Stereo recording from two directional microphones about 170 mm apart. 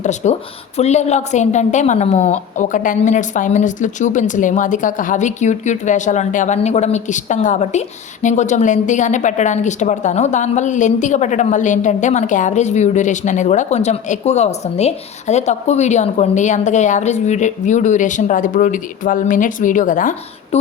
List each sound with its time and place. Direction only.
0.0 s a woman's voice: 45° left (ahead or behind)